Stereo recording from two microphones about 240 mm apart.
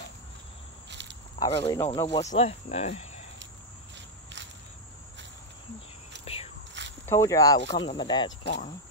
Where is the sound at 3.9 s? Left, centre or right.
Right.